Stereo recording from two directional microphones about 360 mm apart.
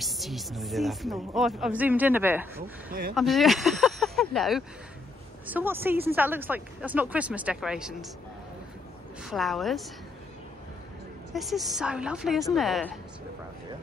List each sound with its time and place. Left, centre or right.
0.0 s speech: centre
2.9 s speech: right
3.2 s speech: centre
9.2 s speech: centre
11.3 s speech: centre